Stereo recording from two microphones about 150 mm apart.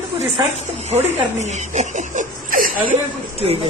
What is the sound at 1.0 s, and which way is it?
Speech, 50° right (ahead or behind).